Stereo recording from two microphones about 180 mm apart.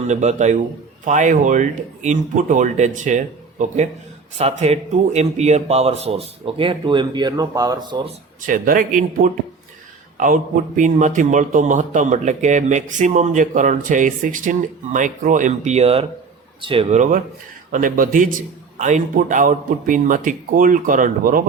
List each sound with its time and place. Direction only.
0.1 s a man's voice: 40° right (ahead or behind); by 8.0 s 25° right (ahead or behind)
8.4 s a man's voice: 50° right (ahead or behind); by 16.8 s 30° right (ahead or behind)
16.9 s a man's voice: 45° right (ahead or behind)